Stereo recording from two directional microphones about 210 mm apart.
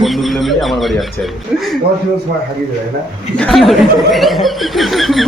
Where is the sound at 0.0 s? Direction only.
Centre (ahead or behind).